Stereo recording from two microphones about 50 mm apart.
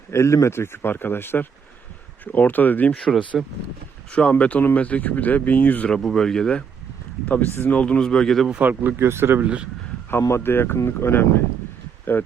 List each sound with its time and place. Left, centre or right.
0.1 s speech: left
2.2 s speech: left
3.3 s speech: centre
4.1 s speech: left
5.9 s speech: centre
7.3 s speech: left; by 8.4 s centre
8.6 s speech: right
9.0 s speech: right
9.4 s speech: right
10.4 s speech: left